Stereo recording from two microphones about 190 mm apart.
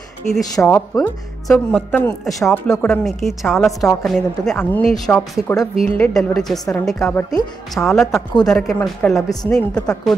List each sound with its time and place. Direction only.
0.3 s a woman's voice: centre (ahead or behind)
8.0 s speech: 15° left (ahead or behind)
8.5 s a woman's voice: centre (ahead or behind)